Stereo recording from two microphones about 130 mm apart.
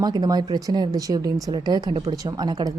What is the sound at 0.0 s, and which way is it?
A woman's voice, 30° right (ahead or behind).